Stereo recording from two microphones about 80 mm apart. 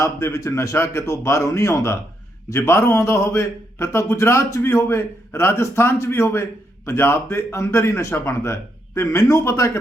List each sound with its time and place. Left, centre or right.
0.0 s a man's voice: left